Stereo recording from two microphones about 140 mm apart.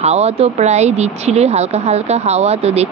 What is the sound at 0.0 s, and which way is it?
Speech, 50° right (ahead or behind).